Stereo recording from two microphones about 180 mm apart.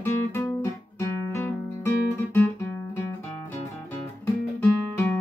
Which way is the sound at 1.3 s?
15° left (ahead or behind).